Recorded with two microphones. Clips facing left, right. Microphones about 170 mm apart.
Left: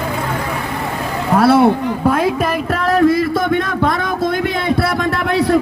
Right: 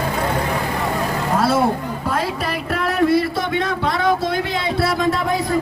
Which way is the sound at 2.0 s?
55° left (ahead or behind).